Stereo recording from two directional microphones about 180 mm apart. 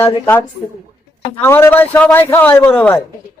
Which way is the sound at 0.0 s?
10° left (ahead or behind).